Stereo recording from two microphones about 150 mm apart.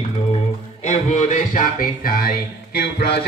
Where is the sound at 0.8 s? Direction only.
50° left (ahead or behind).